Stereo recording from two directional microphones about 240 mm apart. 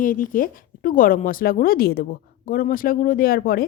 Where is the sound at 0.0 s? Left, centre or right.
Left.